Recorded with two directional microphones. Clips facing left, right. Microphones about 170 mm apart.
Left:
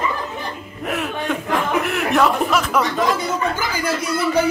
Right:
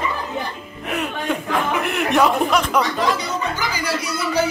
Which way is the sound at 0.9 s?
Centre (ahead or behind).